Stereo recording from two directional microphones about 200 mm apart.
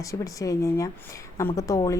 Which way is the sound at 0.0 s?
15° left (ahead or behind).